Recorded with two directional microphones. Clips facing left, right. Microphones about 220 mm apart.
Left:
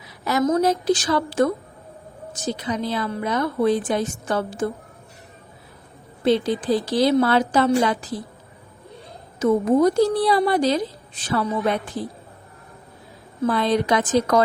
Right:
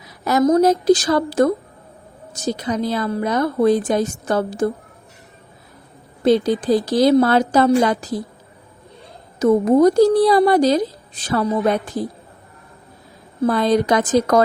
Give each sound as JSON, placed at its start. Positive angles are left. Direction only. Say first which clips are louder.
{"t": 0.3, "sound": "a woman's voice", "louder": "right 5 dB", "side_deg": -40}
{"t": 6.2, "sound": "a woman's voice", "louder": "right 4 dB", "side_deg": -40}
{"t": 9.4, "sound": "a woman's voice", "louder": "right 4 dB", "side_deg": -40}
{"t": 13.4, "sound": "a woman's voice", "louder": "right 4 dB", "side_deg": -40}